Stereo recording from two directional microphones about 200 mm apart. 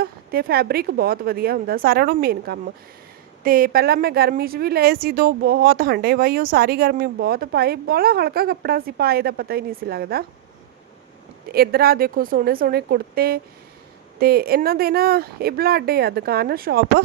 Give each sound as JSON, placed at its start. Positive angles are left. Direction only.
{"t": 0.0, "sound": "a woman's voice", "side_deg": -50}
{"t": 11.4, "sound": "a woman's voice", "side_deg": -50}